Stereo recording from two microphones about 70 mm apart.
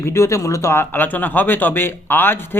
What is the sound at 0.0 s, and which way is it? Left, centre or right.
Speech, left.